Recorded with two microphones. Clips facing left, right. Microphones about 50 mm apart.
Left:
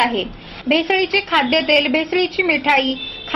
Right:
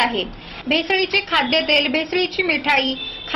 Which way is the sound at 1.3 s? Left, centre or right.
Centre.